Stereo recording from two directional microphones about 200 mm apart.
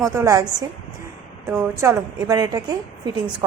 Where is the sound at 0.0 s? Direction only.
15° right (ahead or behind).